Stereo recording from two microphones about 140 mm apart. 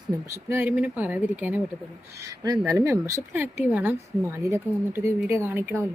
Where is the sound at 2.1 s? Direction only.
25° right (ahead or behind).